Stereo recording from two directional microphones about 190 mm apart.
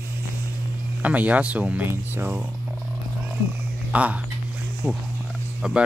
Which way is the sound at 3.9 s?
5° right (ahead or behind).